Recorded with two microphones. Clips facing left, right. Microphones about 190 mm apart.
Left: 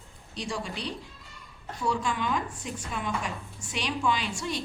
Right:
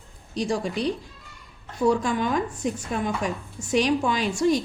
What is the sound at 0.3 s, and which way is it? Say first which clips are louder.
A woman's voice: right 9 dB; 45° right (ahead or behind).